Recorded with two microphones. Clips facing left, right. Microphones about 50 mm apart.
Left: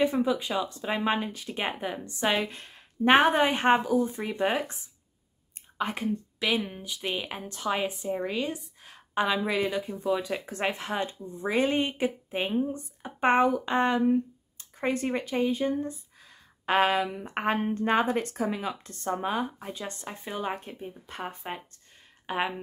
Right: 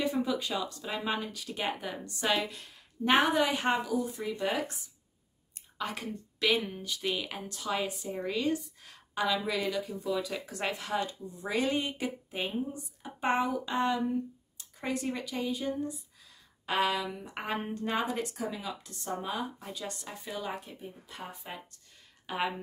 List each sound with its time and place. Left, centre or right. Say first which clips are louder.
0.0 s speech: left 5 dB; left
5.8 s speech: left 5 dB; left
6.4 s speech: even; centre; by 21.5 s left
22.2 s a sound: left 3 dB; left